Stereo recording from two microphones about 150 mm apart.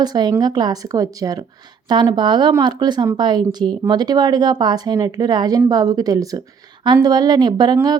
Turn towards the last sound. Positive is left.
turn(degrees=-30)  # may be behind; listen again after turning